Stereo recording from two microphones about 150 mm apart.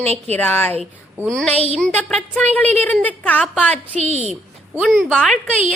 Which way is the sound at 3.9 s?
50° right (ahead or behind).